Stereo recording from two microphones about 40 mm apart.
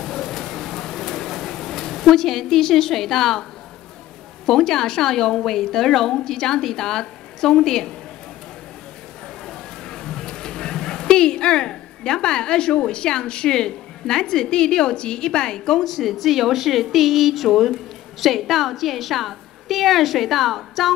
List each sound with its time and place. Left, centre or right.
0.2 s bird: centre
4.5 s a woman's voice: centre
9.8 s a sound: centre
11.7 s a woman's voice: centre